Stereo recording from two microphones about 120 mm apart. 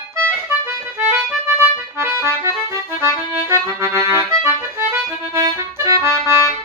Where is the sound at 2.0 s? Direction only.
20° right (ahead or behind).